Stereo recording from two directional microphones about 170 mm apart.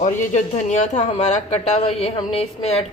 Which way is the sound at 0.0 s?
45° left (ahead or behind).